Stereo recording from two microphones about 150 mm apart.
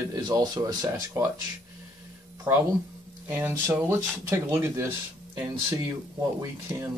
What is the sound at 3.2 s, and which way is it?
Speech, 15° right (ahead or behind).